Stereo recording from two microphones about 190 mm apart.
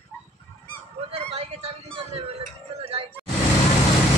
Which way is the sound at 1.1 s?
35° right (ahead or behind).